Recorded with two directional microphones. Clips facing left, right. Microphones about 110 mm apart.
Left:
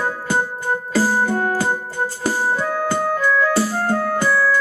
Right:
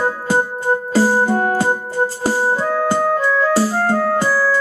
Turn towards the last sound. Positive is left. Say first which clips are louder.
# right 3 dB
turn(degrees=-30)  # may be behind; listen again after turning